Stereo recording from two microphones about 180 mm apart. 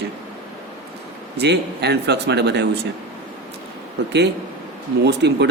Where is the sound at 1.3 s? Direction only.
65° right (ahead or behind).